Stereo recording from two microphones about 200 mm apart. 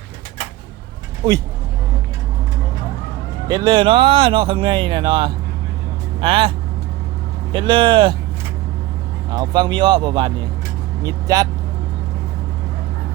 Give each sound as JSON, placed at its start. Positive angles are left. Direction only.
{"t": 1.2, "sound": "speech", "side_deg": -20}
{"t": 3.5, "sound": "speech", "side_deg": -20}
{"t": 7.5, "sound": "speech", "side_deg": -25}
{"t": 9.3, "sound": "speech", "side_deg": -20}